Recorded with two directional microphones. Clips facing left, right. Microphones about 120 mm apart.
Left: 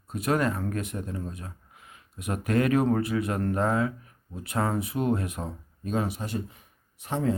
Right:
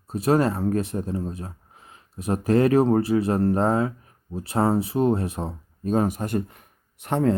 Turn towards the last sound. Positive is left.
turn(degrees=-60)  # may be behind; listen again after turning